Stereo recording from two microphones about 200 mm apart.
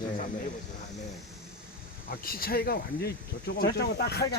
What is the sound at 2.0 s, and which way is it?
Speech, 45° left (ahead or behind).